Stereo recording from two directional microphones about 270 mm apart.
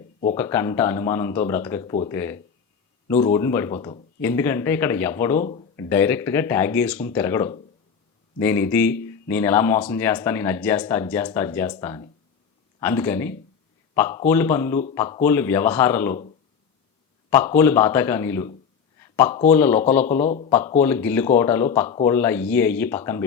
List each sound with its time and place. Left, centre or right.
0.3 s speech: centre
17.2 s speech: centre
20.2 s speech: left
20.8 s speech: centre